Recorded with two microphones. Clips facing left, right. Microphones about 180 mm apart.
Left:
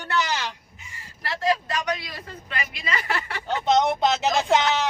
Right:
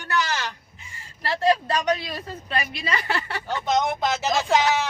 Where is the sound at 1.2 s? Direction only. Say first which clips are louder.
Right 3 dB; 30° right (ahead or behind).